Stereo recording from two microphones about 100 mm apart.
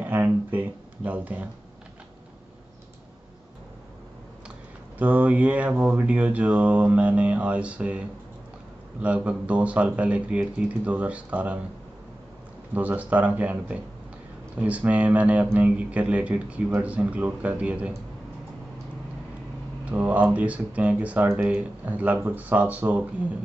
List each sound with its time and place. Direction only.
0.0 s a sound: 20° right (ahead or behind)
4.9 s speech: 15° right (ahead or behind)
12.7 s speech: 15° right (ahead or behind)
19.8 s speech: 15° right (ahead or behind)